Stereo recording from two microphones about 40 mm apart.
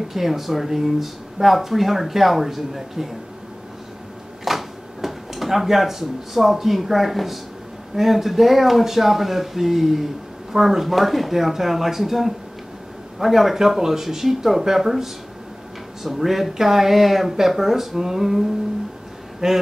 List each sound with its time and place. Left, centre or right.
0.1 s speech: centre
4.5 s speech: centre
19.4 s speech: centre